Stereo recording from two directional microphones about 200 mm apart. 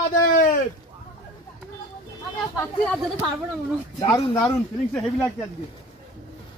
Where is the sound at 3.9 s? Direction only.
15° left (ahead or behind).